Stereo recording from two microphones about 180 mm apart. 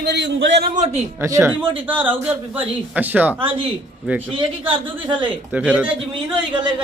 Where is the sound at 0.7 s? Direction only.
35° right (ahead or behind).